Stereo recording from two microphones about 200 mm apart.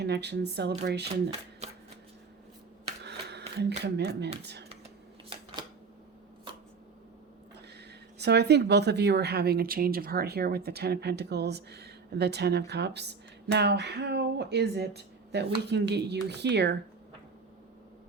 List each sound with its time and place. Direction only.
0.0 s a woman's voice: 55° right (ahead or behind)
1.6 s shuffling cards: 35° right (ahead or behind)
3.0 s a sound: 55° right (ahead or behind)
8.2 s a woman's voice: 55° right (ahead or behind)